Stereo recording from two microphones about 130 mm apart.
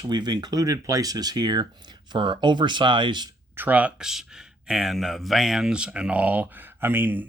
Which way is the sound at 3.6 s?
10° right (ahead or behind).